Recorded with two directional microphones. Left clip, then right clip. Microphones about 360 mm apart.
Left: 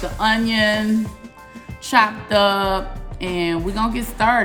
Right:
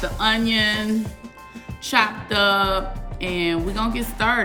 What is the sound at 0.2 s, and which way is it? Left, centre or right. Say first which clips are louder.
A woman's voice: left 2 dB; centre.